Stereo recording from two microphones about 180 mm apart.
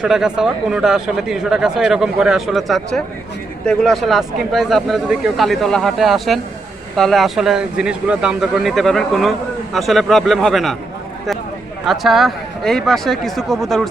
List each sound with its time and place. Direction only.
0.0 s speech: 5° right (ahead or behind)
11.9 s speech: centre (ahead or behind)